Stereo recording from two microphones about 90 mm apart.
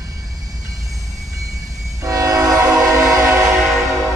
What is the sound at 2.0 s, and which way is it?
Train, 40° right (ahead or behind).